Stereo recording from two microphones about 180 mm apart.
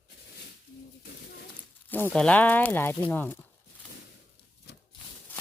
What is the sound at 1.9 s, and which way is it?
Speech, 10° left (ahead or behind).